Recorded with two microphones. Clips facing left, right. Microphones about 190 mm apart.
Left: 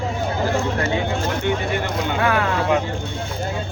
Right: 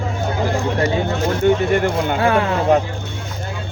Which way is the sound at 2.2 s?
30° right (ahead or behind).